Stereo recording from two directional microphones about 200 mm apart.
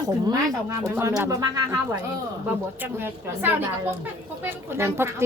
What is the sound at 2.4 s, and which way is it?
Speech, 10° right (ahead or behind).